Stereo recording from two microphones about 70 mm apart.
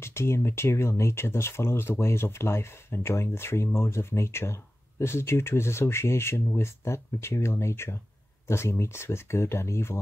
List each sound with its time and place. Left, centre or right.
0.0 s speech: left